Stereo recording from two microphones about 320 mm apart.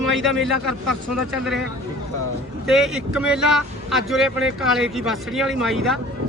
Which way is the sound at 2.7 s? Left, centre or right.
Centre.